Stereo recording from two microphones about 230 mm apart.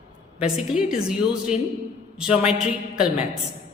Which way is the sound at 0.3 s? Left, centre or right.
Centre.